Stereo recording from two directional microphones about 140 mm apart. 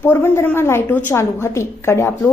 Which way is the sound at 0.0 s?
15° left (ahead or behind).